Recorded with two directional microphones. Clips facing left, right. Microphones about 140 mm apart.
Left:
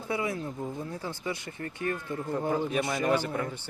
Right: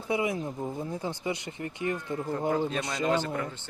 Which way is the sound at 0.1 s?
20° right (ahead or behind).